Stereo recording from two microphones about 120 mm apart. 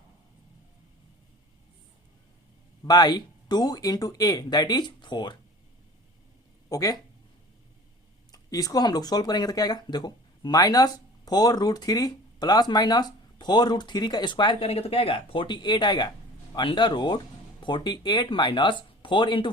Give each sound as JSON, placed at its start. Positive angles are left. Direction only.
{"t": 2.8, "sound": "speech", "side_deg": 35}
{"t": 6.7, "sound": "speech", "side_deg": 30}
{"t": 8.3, "sound": "speech", "side_deg": 30}
{"t": 14.7, "sound": "speech", "side_deg": 55}